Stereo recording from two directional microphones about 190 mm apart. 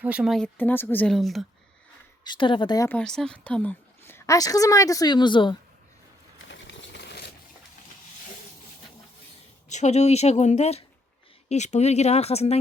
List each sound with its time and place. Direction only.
0.0 s speech: 5° right (ahead or behind)
2.2 s speech: 25° left (ahead or behind)
3.0 s a woman's voice: 5° left (ahead or behind); by 5.5 s 25° left (ahead or behind)
6.5 s a sound: 70° left (ahead or behind)
9.6 s speech: 40° left (ahead or behind)